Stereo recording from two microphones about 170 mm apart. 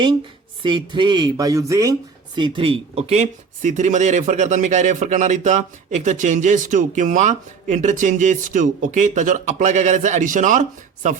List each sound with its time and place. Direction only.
0.6 s speech: 25° right (ahead or behind); by 11.2 s 50° right (ahead or behind)